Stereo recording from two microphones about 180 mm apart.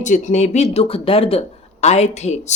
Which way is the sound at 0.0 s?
40° left (ahead or behind).